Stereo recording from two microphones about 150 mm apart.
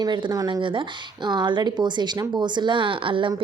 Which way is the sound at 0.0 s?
30° right (ahead or behind).